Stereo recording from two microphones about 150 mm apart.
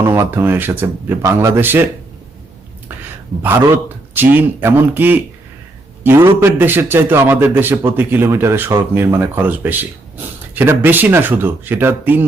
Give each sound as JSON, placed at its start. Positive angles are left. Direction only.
{"t": 0.0, "sound": "speech", "side_deg": -15}
{"t": 3.4, "sound": "a man's voice", "side_deg": -15}